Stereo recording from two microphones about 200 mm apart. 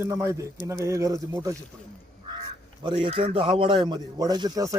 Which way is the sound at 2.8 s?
25° right (ahead or behind).